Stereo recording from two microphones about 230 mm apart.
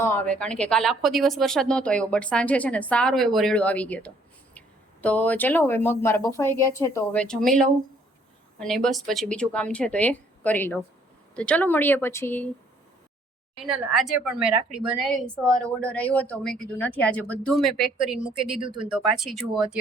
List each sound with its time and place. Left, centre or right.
0.0 s a woman's voice: centre
13.6 s a woman's voice: centre
18.6 s speech: right
18.9 s a woman's voice: centre